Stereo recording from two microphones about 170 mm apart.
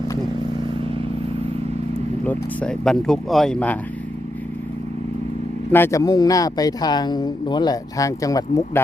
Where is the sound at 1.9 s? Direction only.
10° left (ahead or behind).